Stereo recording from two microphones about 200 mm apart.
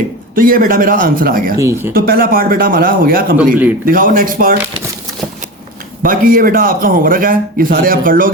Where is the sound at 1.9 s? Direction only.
45° right (ahead or behind).